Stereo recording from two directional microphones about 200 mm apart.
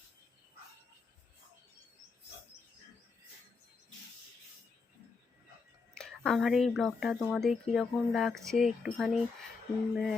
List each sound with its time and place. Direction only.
5.9 s speech: 5° left (ahead or behind)